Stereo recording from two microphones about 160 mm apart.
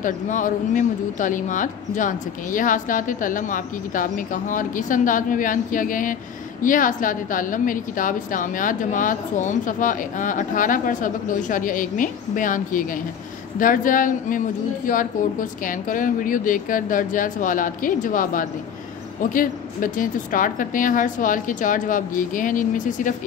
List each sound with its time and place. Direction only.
0.0 s a woman's voice: 55° left (ahead or behind)